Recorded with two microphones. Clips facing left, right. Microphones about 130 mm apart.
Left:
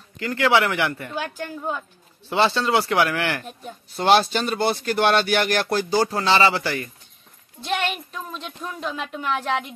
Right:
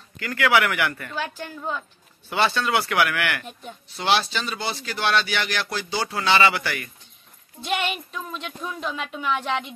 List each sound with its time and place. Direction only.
0.2 s speech: 25° left (ahead or behind)
1.1 s a woman's voice: 15° left (ahead or behind)
2.2 s speech: 25° left (ahead or behind)
3.9 s speech: 45° left (ahead or behind); by 6.9 s 30° left (ahead or behind)
7.6 s a woman's voice: 5° right (ahead or behind)